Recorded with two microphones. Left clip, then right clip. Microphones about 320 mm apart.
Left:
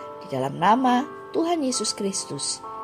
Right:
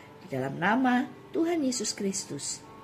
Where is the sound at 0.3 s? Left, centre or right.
Left.